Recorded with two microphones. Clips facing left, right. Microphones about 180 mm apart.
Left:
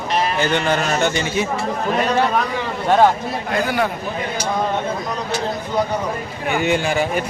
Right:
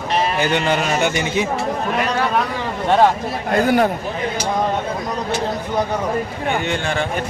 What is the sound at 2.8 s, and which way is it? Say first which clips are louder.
Speech: even; centre (ahead or behind).